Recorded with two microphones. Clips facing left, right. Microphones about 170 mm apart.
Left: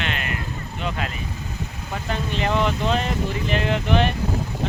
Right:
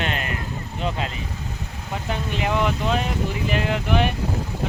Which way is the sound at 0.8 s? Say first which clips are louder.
Right 1 dB; 30° right (ahead or behind).